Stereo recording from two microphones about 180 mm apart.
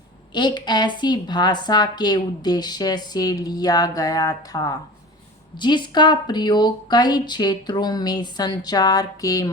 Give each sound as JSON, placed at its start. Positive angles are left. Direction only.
{"t": 0.3, "sound": "a woman's voice", "side_deg": 25}